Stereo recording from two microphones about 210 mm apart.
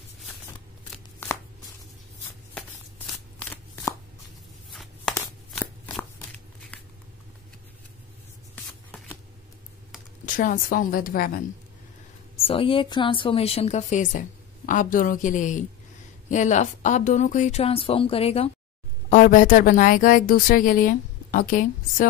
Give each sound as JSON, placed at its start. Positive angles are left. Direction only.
{"t": 3.3, "sound": "shuffling cards", "side_deg": 10}
{"t": 6.7, "sound": "a sound", "side_deg": 5}
{"t": 10.2, "sound": "a woman's voice", "side_deg": 40}
{"t": 12.4, "sound": "a woman's voice", "side_deg": 25}